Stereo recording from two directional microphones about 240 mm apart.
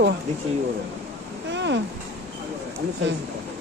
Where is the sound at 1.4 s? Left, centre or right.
Right.